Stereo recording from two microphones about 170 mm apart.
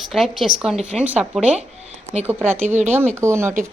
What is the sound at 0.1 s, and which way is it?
A woman's voice, centre (ahead or behind).